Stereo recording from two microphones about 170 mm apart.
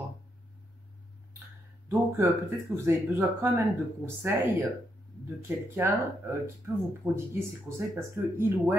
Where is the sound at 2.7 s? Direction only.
15° right (ahead or behind).